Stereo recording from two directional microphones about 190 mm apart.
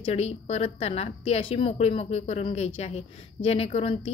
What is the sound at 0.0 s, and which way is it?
A woman's voice, 35° left (ahead or behind).